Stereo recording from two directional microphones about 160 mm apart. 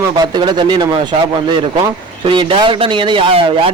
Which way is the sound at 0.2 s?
25° right (ahead or behind).